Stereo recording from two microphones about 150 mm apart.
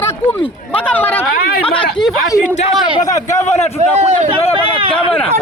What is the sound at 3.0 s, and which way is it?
Speech, 25° left (ahead or behind).